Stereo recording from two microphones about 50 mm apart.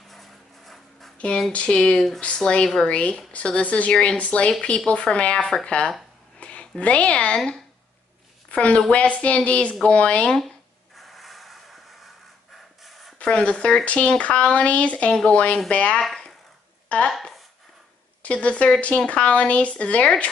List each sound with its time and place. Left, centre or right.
0.1 s dog: centre
1.1 s a sound: left
1.5 s speech: centre
2.9 s speech: left
6.4 s a sound: left
6.8 s a woman's voice: left
11.0 s mechanisms: centre
13.2 s speech: left
18.2 s speech: left